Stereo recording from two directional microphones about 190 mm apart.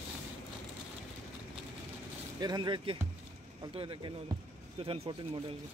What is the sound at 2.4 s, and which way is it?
Speech, 20° right (ahead or behind).